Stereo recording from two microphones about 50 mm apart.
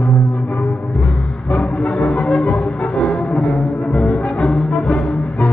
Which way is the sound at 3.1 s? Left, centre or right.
Centre.